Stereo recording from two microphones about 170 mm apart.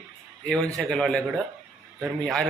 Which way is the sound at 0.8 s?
5° left (ahead or behind).